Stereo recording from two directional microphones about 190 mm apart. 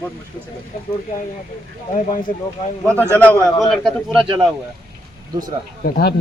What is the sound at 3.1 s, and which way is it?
A man's voice, 10° left (ahead or behind).